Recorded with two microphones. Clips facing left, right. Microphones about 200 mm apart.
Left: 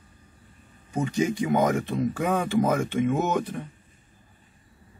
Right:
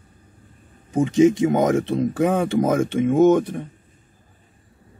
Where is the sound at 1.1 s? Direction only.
90° right.